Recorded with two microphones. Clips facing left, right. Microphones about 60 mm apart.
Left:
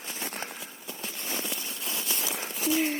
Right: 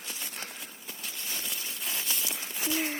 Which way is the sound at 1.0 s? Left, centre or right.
Left.